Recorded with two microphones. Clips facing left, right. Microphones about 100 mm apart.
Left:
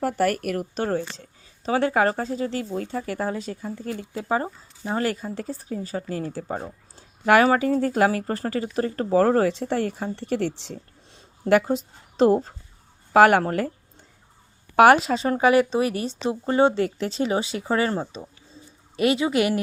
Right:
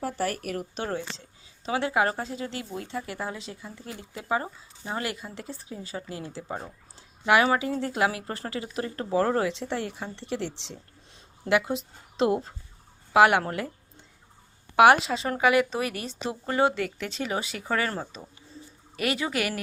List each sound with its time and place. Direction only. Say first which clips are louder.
0.0 s a woman's voice: left 7 dB; 60° left (ahead or behind); by 13.7 s 40° left (ahead or behind)
14.8 s speech: left 3 dB; 40° left (ahead or behind); by 19.6 s 25° left (ahead or behind)